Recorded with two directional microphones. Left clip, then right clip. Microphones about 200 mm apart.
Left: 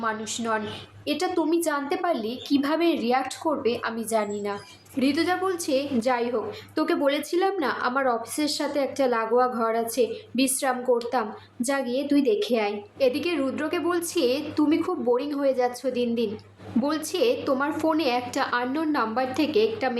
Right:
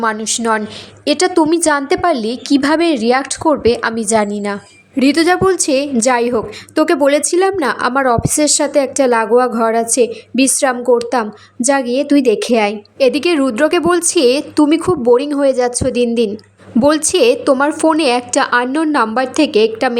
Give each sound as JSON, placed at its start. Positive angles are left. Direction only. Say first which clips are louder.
{"t": 0.0, "sound": "a woman's voice", "louder": "right 12 dB", "side_deg": -45}